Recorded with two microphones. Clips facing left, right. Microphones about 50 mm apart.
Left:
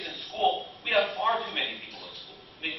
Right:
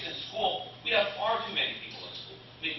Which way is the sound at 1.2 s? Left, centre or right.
Centre.